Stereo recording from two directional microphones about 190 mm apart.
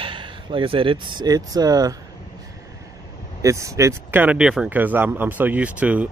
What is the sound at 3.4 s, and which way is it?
Speech, 15° right (ahead or behind).